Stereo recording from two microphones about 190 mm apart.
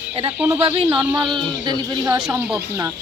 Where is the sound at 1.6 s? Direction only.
20° right (ahead or behind).